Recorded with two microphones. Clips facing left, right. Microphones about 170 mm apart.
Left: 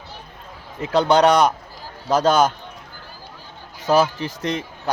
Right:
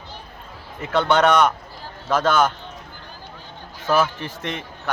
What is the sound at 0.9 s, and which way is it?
A man's voice, 35° left (ahead or behind).